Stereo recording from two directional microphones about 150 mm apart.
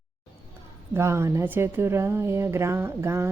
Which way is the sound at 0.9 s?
15° right (ahead or behind).